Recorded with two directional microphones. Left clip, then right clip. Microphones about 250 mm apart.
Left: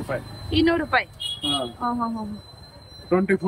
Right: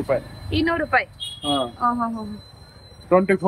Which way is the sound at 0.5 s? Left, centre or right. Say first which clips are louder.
Even; centre.